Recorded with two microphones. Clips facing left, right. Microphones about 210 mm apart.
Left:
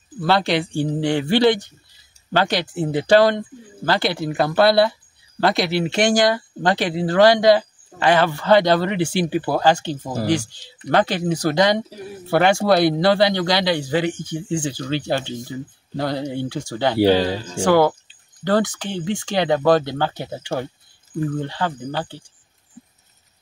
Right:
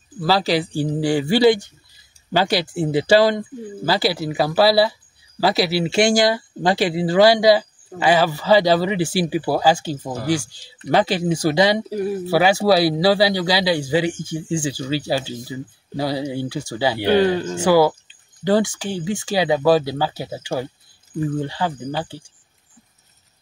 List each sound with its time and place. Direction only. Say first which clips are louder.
0.2 s speech: even; centre (ahead or behind)
17.1 s speech: right 2 dB; 55° right (ahead or behind)
17.6 s speech: even; 5° right (ahead or behind)